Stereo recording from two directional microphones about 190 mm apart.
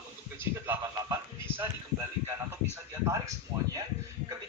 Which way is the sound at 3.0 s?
15° right (ahead or behind).